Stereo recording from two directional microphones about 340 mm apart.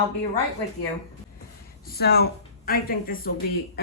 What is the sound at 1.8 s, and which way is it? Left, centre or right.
A woman's voice, left.